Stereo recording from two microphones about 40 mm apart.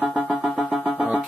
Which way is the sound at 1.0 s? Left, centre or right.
Right.